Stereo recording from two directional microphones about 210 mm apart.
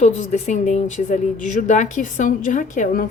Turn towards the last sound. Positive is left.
turn(degrees=40)  # may be behind; listen again after turning